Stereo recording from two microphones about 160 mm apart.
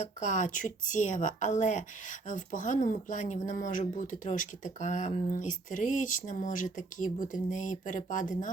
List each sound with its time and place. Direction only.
0.0 s speech: 50° left (ahead or behind)